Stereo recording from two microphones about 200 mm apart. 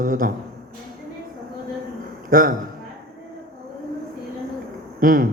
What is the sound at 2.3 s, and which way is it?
Speech, 45° right (ahead or behind).